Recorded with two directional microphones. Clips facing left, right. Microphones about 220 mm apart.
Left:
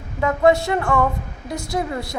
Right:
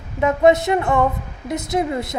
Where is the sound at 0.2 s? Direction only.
20° right (ahead or behind).